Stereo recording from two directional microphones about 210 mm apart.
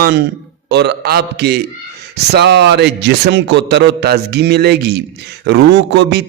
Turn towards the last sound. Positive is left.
turn(degrees=-55)  # may be behind; listen again after turning